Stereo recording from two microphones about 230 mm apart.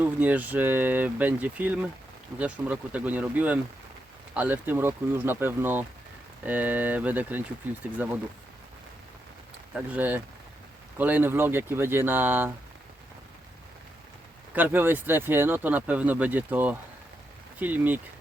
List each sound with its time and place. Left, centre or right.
0.0 s speech: centre
9.7 s speech: centre
14.5 s speech: centre